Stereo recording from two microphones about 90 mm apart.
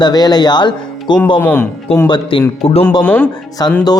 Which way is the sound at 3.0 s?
20° left (ahead or behind).